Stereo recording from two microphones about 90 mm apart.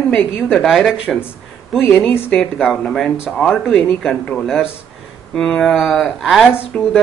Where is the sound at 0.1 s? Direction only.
10° left (ahead or behind).